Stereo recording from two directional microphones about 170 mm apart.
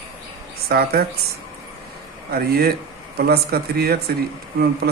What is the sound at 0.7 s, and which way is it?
Speech, 65° right (ahead or behind).